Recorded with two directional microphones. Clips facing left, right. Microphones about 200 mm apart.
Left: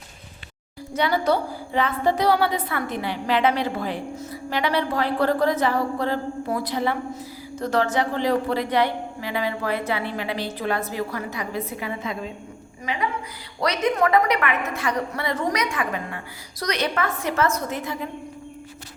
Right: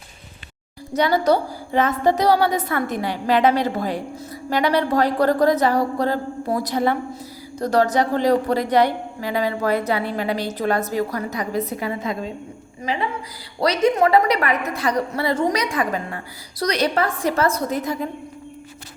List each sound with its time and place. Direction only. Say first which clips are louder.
0.9 s a woman's voice: right 4 dB; 40° right (ahead or behind)